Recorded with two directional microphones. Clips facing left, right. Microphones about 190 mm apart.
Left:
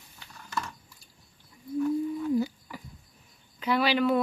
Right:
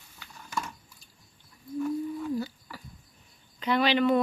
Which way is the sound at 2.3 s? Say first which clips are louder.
Left 5 dB; 15° left (ahead or behind).